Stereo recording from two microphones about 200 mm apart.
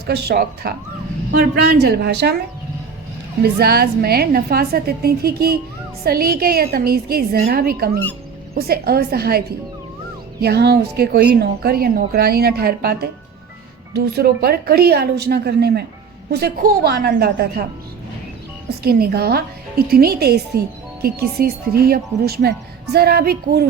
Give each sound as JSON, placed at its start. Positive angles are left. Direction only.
{"t": 0.0, "sound": "speech", "side_deg": -55}
{"t": 3.4, "sound": "speech", "side_deg": -50}
{"t": 10.4, "sound": "speech", "side_deg": -55}
{"t": 18.8, "sound": "speech", "side_deg": -50}